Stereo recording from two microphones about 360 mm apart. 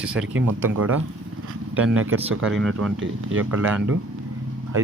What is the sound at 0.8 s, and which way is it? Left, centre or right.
Speech, right.